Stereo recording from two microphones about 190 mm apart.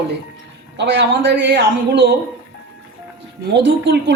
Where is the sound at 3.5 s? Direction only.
65° right (ahead or behind).